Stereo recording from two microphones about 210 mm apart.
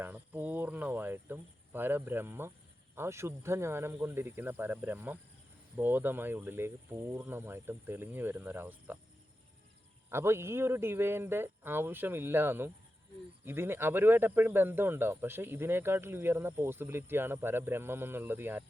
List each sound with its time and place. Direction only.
0.0 s speech: 10° right (ahead or behind)
10.1 s speech: 10° right (ahead or behind)